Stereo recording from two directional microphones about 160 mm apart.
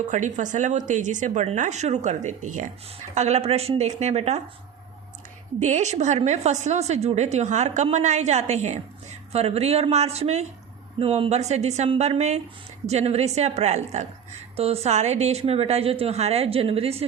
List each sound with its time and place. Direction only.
0.1 s a woman's voice: 50° right (ahead or behind)
5.5 s a woman's voice: 45° right (ahead or behind)